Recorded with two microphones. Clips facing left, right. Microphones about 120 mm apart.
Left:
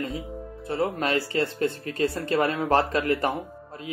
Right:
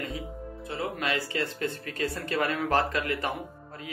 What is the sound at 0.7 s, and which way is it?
Speech, 40° left (ahead or behind).